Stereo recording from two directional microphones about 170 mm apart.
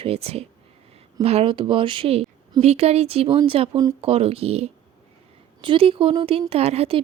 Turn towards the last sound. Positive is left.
turn(degrees=-35)  # may be behind; listen again after turning